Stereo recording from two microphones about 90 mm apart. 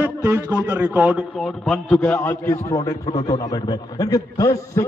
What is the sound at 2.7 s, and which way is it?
A man's voice, 40° left (ahead or behind).